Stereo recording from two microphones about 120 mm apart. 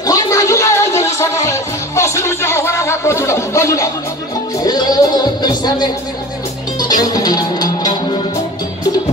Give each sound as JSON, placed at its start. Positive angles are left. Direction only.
{"t": 0.0, "sound": "music", "side_deg": 25}
{"t": 4.6, "sound": "speech", "side_deg": 35}
{"t": 6.8, "sound": "music", "side_deg": 35}